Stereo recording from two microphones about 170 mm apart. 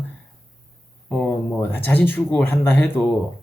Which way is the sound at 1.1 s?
10° left (ahead or behind).